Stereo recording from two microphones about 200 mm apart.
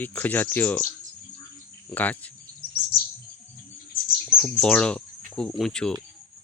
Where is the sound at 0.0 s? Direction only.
10° left (ahead or behind).